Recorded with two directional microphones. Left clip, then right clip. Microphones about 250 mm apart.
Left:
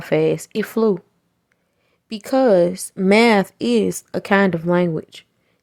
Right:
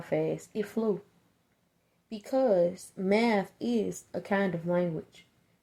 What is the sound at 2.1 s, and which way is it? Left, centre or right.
Speech, left.